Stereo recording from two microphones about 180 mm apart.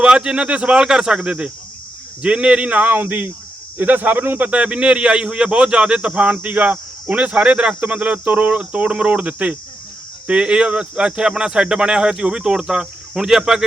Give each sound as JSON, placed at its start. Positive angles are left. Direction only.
{"t": 0.0, "sound": "speech", "side_deg": -5}